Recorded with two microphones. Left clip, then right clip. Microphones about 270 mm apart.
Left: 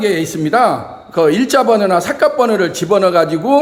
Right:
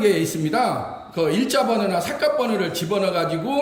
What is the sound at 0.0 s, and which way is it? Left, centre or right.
A man's voice, centre.